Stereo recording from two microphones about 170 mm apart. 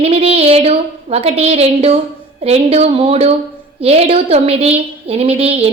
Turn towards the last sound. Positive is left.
turn(degrees=-35)  # may be behind; listen again after turning